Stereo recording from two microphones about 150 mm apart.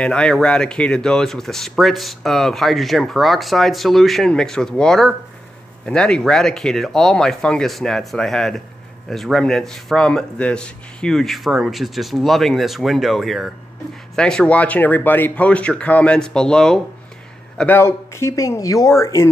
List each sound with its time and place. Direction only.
0.0 s speech: 5° left (ahead or behind)
17.6 s speech: 15° left (ahead or behind)